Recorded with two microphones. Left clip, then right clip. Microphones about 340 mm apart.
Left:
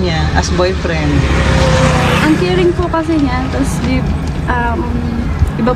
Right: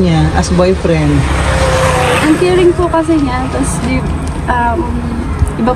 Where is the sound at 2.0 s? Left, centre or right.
Right.